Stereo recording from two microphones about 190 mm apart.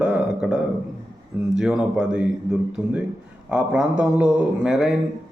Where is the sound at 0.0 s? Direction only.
5° right (ahead or behind).